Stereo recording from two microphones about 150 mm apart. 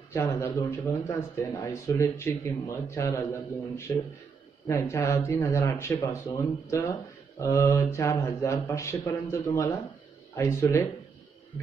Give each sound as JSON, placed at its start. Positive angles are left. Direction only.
{"t": 0.1, "sound": "speech", "side_deg": 20}